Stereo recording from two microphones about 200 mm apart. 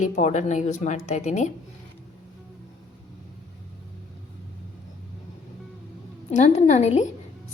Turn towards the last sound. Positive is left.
turn(degrees=35)  # may be behind; listen again after turning